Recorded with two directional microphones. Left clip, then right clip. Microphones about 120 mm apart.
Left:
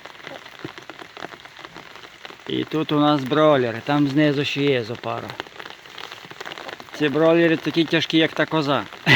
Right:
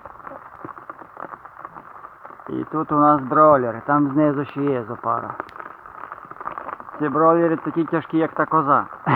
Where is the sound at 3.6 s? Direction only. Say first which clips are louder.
Left 1 dB; 30° left (ahead or behind).